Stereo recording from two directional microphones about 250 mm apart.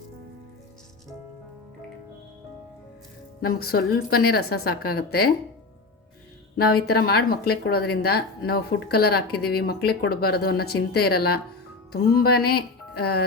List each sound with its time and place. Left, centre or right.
3.4 s a woman's voice: left
6.7 s a woman's voice: left
11.9 s music: left